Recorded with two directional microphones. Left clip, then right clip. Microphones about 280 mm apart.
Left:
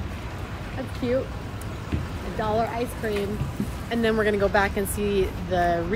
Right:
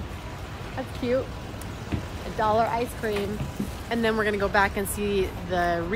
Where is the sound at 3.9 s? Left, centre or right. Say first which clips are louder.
Left 2 dB; centre.